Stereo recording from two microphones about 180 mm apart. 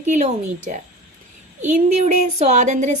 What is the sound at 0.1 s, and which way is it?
A woman's voice, 40° right (ahead or behind).